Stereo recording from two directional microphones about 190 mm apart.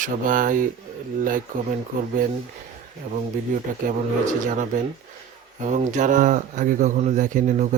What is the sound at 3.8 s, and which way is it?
Speech, 45° right (ahead or behind).